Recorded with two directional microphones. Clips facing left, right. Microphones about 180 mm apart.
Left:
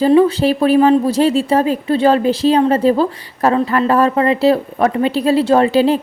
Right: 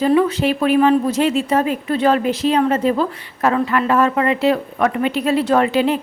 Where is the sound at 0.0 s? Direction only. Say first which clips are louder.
Left 4 dB; 30° left (ahead or behind).